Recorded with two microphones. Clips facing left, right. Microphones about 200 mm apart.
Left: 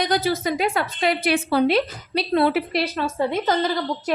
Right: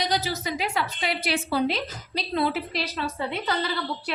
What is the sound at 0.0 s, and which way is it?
A woman's voice, 55° left (ahead or behind).